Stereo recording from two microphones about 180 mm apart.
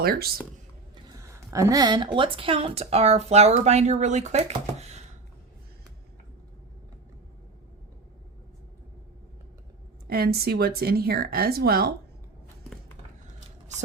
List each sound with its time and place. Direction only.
0.0 s speech: 60° right (ahead or behind)
1.1 s speech: 15° right (ahead or behind); by 5.0 s 40° right (ahead or behind)
10.1 s speech: 55° right (ahead or behind)